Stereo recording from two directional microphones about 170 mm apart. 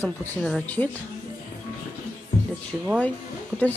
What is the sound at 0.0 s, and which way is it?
Speech, 10° left (ahead or behind).